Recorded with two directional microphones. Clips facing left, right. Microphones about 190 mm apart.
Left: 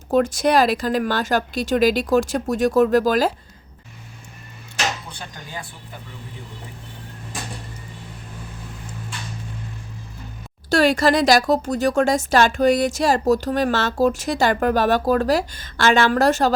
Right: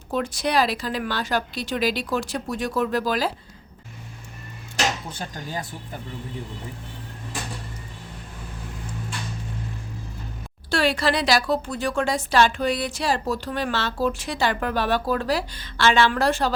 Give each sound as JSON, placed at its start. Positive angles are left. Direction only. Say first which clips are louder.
{"t": 0.1, "sound": "speech", "louder": "left 7 dB", "side_deg": 45}
{"t": 5.0, "sound": "speech", "louder": "right 4 dB", "side_deg": -45}
{"t": 10.7, "sound": "speech", "louder": "left 5 dB", "side_deg": 45}